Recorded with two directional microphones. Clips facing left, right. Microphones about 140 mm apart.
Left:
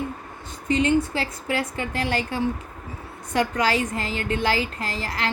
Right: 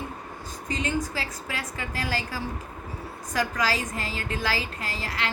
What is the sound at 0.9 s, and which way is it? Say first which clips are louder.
Speech: left 7 dB; 30° left (ahead or behind).